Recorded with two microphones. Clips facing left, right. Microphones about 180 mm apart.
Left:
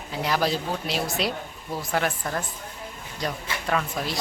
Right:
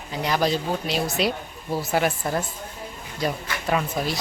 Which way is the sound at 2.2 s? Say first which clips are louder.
Right 4 dB; 25° right (ahead or behind).